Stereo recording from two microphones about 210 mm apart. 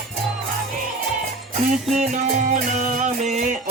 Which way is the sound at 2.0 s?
35° right (ahead or behind).